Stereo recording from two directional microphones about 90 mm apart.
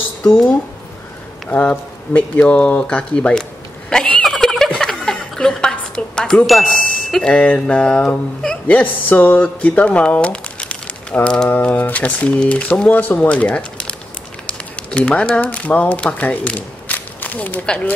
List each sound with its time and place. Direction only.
1.5 s speech: 20° left (ahead or behind)
3.9 s a sound: 5° left (ahead or behind)
9.1 s speech: 20° left (ahead or behind)